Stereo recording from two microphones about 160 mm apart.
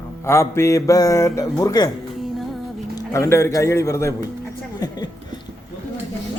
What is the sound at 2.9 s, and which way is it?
A man's voice, 20° left (ahead or behind).